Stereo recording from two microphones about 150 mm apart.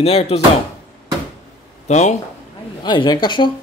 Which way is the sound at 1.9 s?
50° left (ahead or behind).